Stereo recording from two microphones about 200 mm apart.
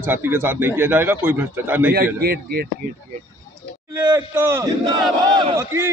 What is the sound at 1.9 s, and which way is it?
Speech, 50° right (ahead or behind).